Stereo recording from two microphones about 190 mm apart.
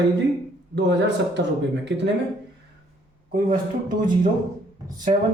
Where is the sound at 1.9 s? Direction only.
65° right (ahead or behind).